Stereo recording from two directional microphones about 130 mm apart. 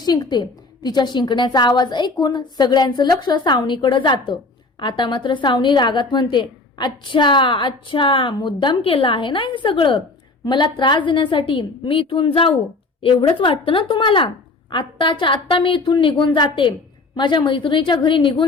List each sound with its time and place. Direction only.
0.0 s a woman's voice: 30° left (ahead or behind)